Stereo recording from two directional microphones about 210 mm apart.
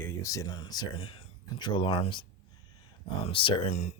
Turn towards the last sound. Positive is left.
turn(degrees=30)  # may be behind; listen again after turning